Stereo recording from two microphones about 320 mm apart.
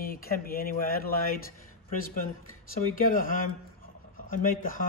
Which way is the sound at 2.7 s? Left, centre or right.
Left.